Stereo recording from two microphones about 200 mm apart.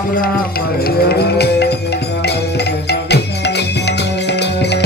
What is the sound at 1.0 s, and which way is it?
Music, 55° left (ahead or behind).